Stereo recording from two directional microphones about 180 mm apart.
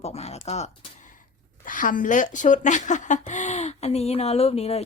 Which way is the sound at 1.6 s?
50° left (ahead or behind).